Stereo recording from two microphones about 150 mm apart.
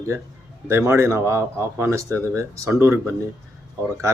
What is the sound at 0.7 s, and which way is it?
Speech, 15° right (ahead or behind).